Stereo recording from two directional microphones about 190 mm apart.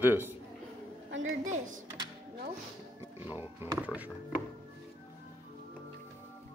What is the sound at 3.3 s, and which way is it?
Music, 10° right (ahead or behind).